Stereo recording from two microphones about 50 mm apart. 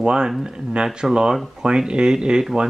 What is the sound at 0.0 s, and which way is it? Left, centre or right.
Speech, centre.